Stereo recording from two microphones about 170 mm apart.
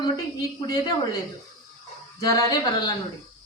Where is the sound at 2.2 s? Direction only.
20° left (ahead or behind).